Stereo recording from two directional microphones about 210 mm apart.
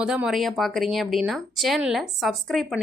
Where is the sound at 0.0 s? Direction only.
5° right (ahead or behind).